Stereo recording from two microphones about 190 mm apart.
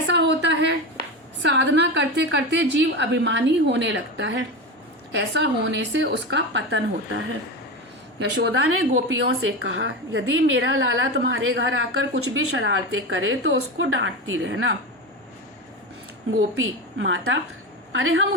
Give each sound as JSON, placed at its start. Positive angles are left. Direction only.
{"t": 0.1, "sound": "a sound", "side_deg": -65}
{"t": 1.4, "sound": "a woman's voice", "side_deg": -65}
{"t": 8.2, "sound": "a woman's voice", "side_deg": -65}
{"t": 9.1, "sound": "a woman's voice", "side_deg": -90}
{"t": 16.6, "sound": "a woman's voice", "side_deg": -90}